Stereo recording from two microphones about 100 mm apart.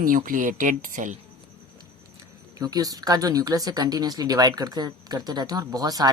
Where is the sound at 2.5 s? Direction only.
40° right (ahead or behind).